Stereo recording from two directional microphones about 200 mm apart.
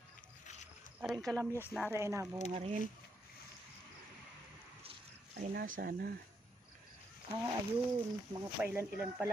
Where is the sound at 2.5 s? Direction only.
30° right (ahead or behind).